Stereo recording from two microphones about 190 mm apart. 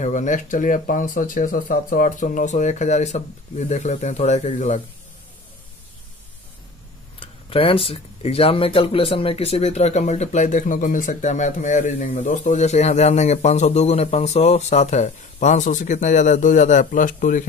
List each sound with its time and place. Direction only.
0.0 s speech: 40° left (ahead or behind)
7.2 s speech: 30° left (ahead or behind)